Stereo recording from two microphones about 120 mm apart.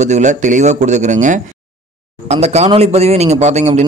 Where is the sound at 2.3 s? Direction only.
65° right (ahead or behind).